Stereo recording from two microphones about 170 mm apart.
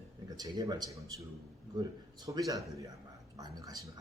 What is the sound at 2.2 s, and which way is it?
A man's voice, 20° right (ahead or behind).